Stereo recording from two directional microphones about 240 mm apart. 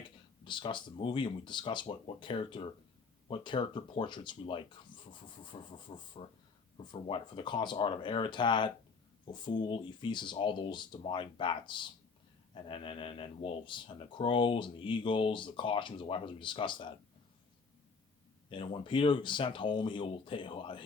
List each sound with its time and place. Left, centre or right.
0.0 s speech: centre
18.4 s speech: left